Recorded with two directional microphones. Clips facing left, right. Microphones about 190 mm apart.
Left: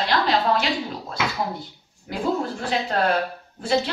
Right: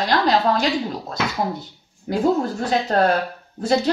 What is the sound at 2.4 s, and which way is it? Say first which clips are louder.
Speech: right 4 dB; 40° right (ahead or behind).